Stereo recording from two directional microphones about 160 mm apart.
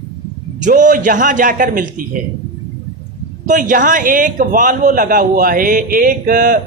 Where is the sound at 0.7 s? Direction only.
55° right (ahead or behind).